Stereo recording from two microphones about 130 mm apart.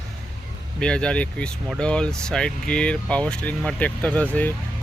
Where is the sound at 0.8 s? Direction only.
5° left (ahead or behind).